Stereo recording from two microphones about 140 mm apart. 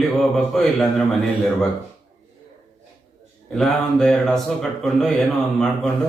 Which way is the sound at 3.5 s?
5° left (ahead or behind).